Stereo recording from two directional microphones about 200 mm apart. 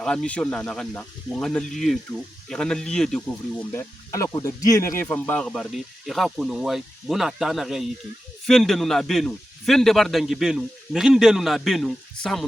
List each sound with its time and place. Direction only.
0.0 s speech: 5° left (ahead or behind)